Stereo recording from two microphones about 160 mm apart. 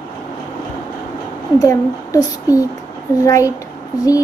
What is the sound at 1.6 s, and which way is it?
Speech, 20° left (ahead or behind).